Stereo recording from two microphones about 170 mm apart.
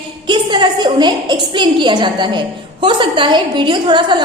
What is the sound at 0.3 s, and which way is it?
A woman's voice, 25° right (ahead or behind).